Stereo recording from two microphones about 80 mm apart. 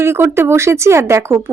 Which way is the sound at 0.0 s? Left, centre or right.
Right.